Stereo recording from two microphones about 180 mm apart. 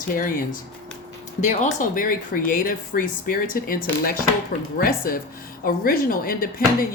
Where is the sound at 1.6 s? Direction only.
50° left (ahead or behind).